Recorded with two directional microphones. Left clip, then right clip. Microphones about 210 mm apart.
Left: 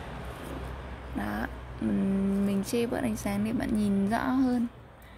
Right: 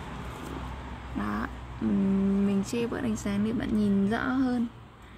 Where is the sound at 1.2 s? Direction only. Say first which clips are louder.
Right 1 dB; 10° left (ahead or behind).